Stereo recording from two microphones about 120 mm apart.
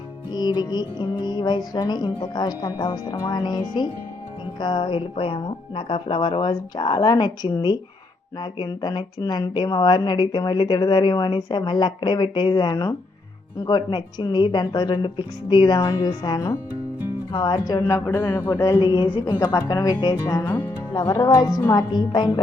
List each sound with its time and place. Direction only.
0.3 s a woman's voice: 35° left (ahead or behind); by 18.6 s 20° left (ahead or behind)
18.6 s a woman's voice: 35° left (ahead or behind)
19.4 s a woman's voice: 25° left (ahead or behind)
21.8 s a woman's voice: 40° left (ahead or behind)